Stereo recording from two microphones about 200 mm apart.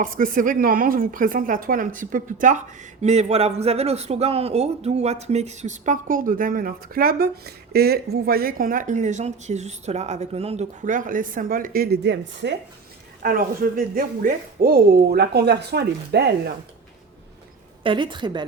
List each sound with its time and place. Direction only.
0.0 s speech: 40° right (ahead or behind); by 12.5 s 60° right (ahead or behind)
13.2 s speech: 45° right (ahead or behind)
17.8 s a woman's voice: 25° right (ahead or behind)